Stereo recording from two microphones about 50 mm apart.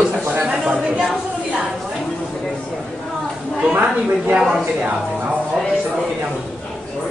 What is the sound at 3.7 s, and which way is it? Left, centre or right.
Speech, right.